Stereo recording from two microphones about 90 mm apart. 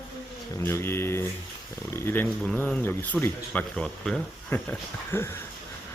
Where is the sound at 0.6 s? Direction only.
30° left (ahead or behind); by 4.2 s 10° left (ahead or behind).